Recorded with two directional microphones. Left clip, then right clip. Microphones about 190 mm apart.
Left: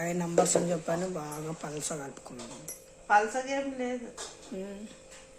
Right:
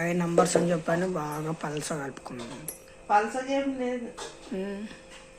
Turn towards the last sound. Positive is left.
turn(degrees=0)  # may be behind; listen again after turning